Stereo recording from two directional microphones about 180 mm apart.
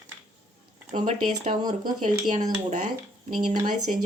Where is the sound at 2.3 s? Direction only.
40° right (ahead or behind).